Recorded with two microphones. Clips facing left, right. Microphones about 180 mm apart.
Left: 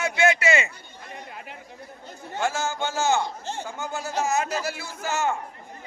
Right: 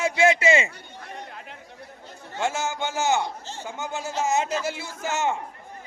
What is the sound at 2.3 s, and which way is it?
A man's voice, 20° right (ahead or behind).